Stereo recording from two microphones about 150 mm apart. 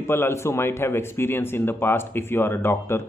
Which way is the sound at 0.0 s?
15° left (ahead or behind).